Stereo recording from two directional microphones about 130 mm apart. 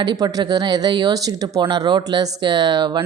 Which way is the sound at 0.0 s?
30° right (ahead or behind).